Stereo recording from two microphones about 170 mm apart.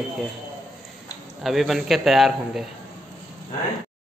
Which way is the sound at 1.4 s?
Centre (ahead or behind).